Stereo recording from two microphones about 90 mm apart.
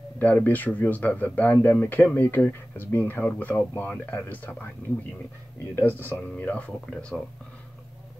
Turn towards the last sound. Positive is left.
turn(degrees=10)  # may be behind; listen again after turning